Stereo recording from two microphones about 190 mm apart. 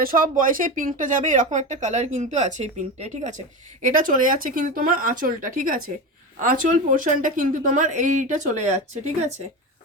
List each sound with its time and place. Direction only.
0.0 s speech: 45° right (ahead or behind)